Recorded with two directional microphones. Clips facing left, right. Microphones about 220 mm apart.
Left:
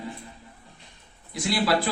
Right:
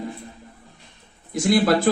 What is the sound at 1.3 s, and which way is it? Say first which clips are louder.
Speech: right 6 dB; 45° right (ahead or behind).